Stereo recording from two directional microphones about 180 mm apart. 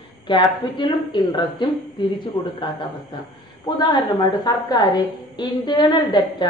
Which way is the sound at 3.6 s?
25° left (ahead or behind).